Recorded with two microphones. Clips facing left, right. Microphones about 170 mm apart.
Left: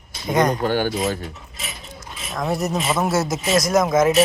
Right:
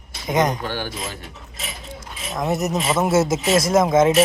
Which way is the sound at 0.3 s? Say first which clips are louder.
Left 1 dB; 20° right (ahead or behind).